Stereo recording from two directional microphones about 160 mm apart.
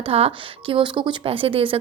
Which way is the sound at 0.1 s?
35° right (ahead or behind).